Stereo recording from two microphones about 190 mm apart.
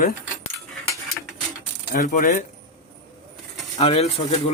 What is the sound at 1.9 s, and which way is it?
Speech, 45° left (ahead or behind).